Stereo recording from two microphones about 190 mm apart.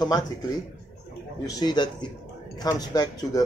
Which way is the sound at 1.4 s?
20° left (ahead or behind).